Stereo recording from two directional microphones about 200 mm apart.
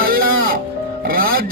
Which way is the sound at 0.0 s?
45° right (ahead or behind).